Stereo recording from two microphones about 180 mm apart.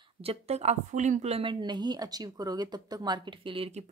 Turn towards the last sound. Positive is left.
turn(degrees=-35)  # may be behind; listen again after turning